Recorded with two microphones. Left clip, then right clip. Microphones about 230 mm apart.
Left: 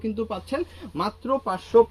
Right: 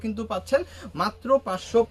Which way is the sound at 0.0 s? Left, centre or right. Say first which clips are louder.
Left 1 dB; right.